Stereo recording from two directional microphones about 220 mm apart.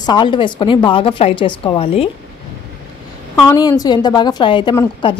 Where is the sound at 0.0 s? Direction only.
20° left (ahead or behind).